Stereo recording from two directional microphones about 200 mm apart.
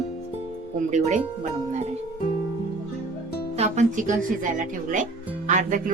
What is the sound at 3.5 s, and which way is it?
Speech, 35° right (ahead or behind).